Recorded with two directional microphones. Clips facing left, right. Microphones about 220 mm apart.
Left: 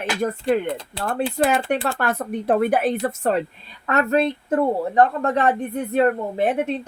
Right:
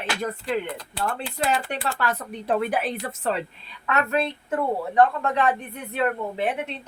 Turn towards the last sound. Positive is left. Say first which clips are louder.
# left 6 dB
turn(degrees=45)  # may be behind; listen again after turning